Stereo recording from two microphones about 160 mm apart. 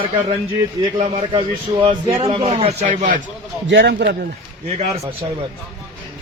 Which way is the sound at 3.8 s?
90° right.